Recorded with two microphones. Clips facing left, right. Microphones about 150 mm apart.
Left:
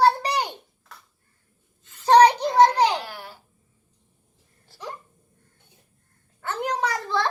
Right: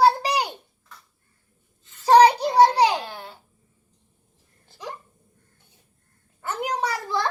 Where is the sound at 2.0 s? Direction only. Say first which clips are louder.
Right 1 dB; 10° right (ahead or behind).